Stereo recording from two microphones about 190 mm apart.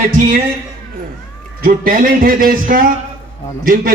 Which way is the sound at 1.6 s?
45° right (ahead or behind).